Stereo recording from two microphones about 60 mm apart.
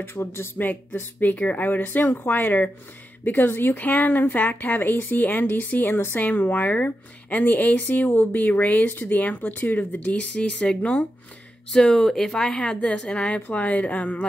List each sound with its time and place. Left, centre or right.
0.0 s speech: left
0.6 s a woman's voice: left
11.7 s a woman's voice: centre; by 14.2 s left